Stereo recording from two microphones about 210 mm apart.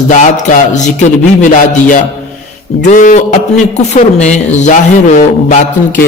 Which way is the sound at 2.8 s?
35° left (ahead or behind).